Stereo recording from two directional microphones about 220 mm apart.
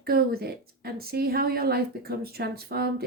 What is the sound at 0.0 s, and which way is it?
A woman's voice, 45° right (ahead or behind).